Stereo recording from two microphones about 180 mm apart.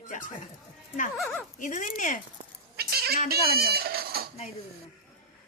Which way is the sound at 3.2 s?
60° right (ahead or behind).